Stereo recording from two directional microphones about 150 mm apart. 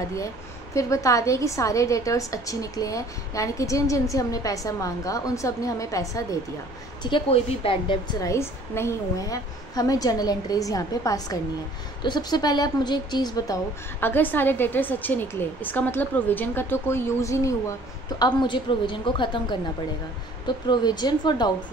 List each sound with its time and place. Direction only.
0.7 s a woman's voice: 20° left (ahead or behind)
7.0 s a woman's voice: 35° left (ahead or behind)
13.9 s a woman's voice: 15° left (ahead or behind)
18.2 s a woman's voice: 30° left (ahead or behind)